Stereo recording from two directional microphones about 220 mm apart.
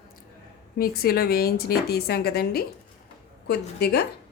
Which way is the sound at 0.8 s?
45° left (ahead or behind).